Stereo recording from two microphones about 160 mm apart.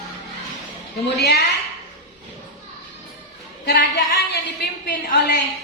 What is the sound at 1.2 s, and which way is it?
Speech, 90° left.